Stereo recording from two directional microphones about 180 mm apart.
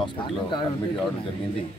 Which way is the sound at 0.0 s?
25° left (ahead or behind).